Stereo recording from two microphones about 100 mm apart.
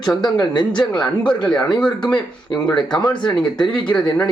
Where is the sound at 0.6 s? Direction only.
50° left (ahead or behind).